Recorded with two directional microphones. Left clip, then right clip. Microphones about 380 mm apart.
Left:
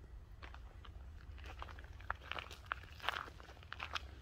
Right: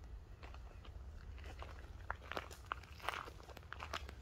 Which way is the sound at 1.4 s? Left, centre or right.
Centre.